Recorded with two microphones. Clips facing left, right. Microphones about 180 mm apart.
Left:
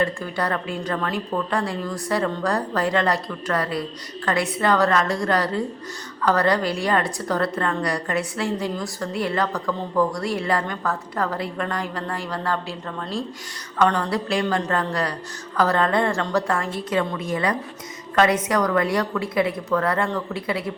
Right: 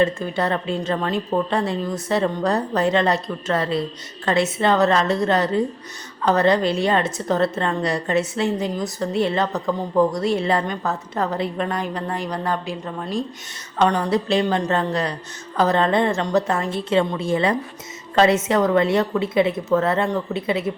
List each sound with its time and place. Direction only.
0.0 s a woman's voice: 20° right (ahead or behind)